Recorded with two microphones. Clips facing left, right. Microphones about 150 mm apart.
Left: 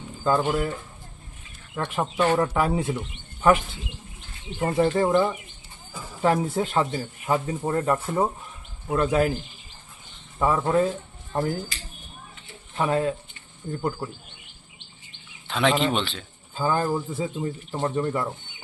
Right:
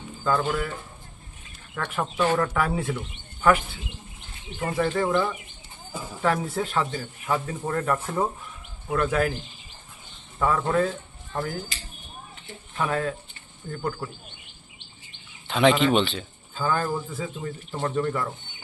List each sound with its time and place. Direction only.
0.3 s speech: 25° left (ahead or behind)
1.7 s speech: 20° left (ahead or behind)
4.6 s speech: 20° left (ahead or behind)
10.3 s speech: 20° left (ahead or behind)
12.7 s speech: 25° left (ahead or behind)
15.4 s a sound: centre (ahead or behind)
15.8 s a man's voice: centre (ahead or behind)
16.6 s speech: 20° left (ahead or behind)